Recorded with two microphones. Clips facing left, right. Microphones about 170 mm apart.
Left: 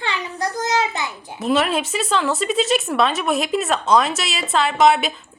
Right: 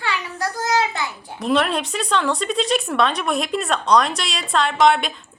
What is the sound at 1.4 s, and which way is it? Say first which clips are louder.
Speech: left 1 dB; 5° left (ahead or behind).